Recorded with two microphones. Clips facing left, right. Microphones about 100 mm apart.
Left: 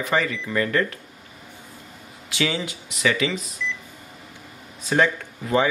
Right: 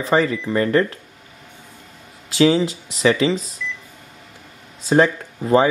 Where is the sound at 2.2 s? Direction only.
30° right (ahead or behind).